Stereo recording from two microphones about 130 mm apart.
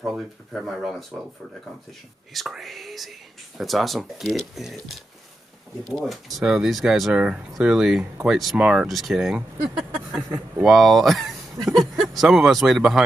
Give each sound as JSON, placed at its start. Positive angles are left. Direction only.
{"t": 0.0, "sound": "speech", "side_deg": 0}
{"t": 2.3, "sound": "speech", "side_deg": 0}
{"t": 10.6, "sound": "speech", "side_deg": 0}